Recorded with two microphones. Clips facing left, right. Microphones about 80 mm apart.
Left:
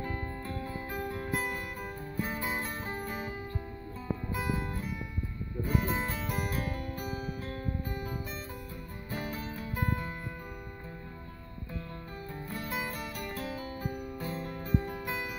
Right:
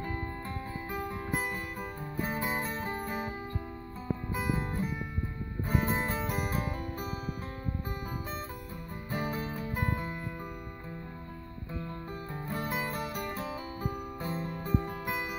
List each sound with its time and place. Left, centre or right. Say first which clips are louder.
0.9 s guitar: even; centre
3.1 s music: right 2 dB; centre
4.5 s music: right 2 dB; right
9.1 s music: right 3 dB; right
12.5 s music: right 3 dB; right